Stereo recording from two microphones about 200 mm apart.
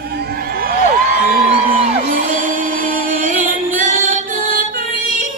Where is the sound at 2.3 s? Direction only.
45° right (ahead or behind).